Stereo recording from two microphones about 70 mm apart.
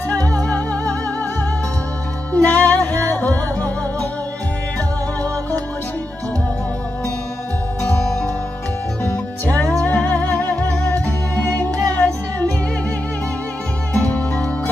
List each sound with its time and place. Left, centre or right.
0.3 s music: centre
2.3 s music: left
7.8 s music: centre
13.9 s music: left